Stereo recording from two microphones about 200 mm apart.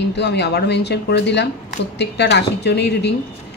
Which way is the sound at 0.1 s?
60° left (ahead or behind).